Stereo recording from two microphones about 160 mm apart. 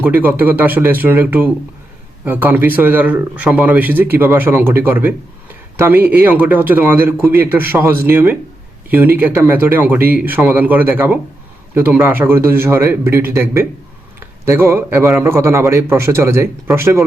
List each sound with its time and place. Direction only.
0.0 s speech: 10° right (ahead or behind)